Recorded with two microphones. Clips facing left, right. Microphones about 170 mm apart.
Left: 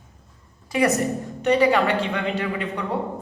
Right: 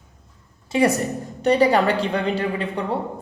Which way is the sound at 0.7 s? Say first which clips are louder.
Right 1 dB; 30° right (ahead or behind).